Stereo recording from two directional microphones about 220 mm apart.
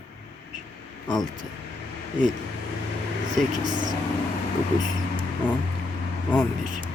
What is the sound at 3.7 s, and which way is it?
Speech, 20° right (ahead or behind).